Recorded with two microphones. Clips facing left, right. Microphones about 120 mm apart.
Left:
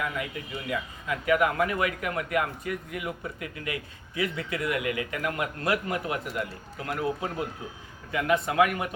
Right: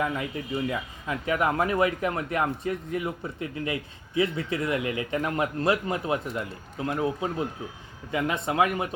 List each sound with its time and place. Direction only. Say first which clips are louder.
0.7 s speech: even; 30° right (ahead or behind)